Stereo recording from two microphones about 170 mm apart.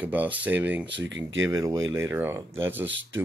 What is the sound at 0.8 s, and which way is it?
Speech, 90° right.